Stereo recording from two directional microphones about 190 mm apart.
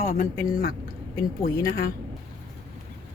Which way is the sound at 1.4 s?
50° left (ahead or behind).